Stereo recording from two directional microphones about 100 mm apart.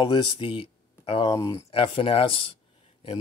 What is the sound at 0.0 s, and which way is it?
Speech, 50° left (ahead or behind).